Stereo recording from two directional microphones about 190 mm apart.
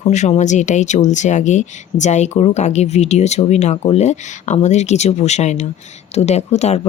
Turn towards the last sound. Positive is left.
turn(degrees=35)  # may be behind; listen again after turning